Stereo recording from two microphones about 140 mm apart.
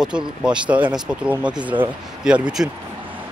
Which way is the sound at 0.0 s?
5° right (ahead or behind).